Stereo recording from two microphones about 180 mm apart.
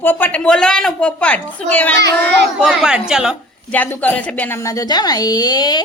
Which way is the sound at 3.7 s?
10° left (ahead or behind).